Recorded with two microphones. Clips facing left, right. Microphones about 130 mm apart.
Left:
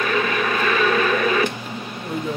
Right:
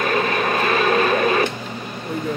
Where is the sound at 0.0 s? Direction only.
40° right (ahead or behind).